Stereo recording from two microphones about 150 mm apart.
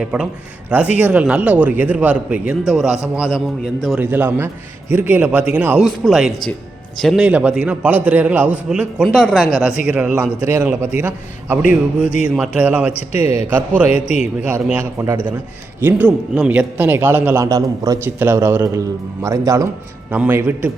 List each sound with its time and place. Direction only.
0.0 s a man's voice: 5° right (ahead or behind)
3.9 s a man's voice: 15° right (ahead or behind)
9.8 s a man's voice: 10° right (ahead or behind)
13.1 s a man's voice: 40° left (ahead or behind)
13.5 s a man's voice: 10° right (ahead or behind)